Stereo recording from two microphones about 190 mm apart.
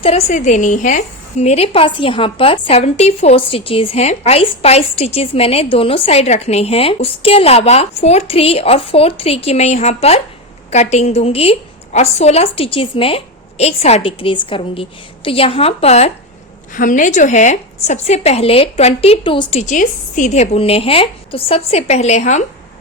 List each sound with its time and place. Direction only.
0.0 s a woman's voice: 35° left (ahead or behind)